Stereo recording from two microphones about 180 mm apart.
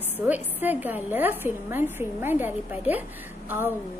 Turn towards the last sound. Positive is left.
turn(degrees=-10)  # may be behind; listen again after turning